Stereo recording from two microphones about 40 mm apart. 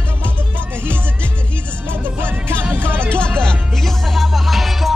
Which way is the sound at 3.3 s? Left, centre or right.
Centre.